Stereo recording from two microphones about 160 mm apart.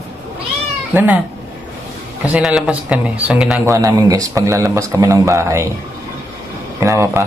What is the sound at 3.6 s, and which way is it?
Speech, 20° right (ahead or behind).